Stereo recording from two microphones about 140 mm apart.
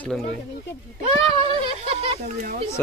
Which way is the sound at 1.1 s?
45° right (ahead or behind).